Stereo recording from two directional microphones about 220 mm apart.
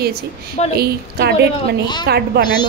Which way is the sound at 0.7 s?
45° right (ahead or behind).